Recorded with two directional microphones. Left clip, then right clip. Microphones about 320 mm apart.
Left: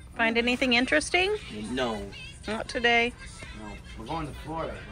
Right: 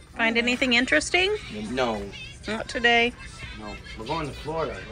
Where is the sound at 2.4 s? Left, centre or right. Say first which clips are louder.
Right 3 dB; centre.